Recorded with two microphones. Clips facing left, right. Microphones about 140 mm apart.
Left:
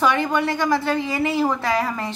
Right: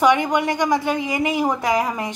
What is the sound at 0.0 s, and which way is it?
A woman's voice, 15° right (ahead or behind).